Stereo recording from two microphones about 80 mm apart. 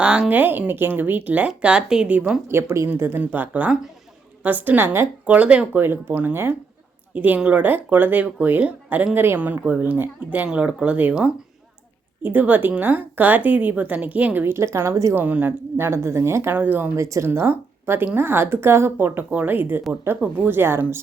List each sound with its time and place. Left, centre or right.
0.0 s a woman's voice: centre
2.5 s a woman's voice: right
12.2 s a woman's voice: right
15.1 s a woman's voice: right
15.9 s speech: right
17.0 s a woman's voice: right